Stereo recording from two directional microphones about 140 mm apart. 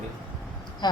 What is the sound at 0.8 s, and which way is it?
Speech, 30° left (ahead or behind).